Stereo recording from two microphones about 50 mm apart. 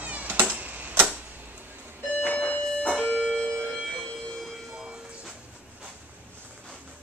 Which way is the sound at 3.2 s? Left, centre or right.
Centre.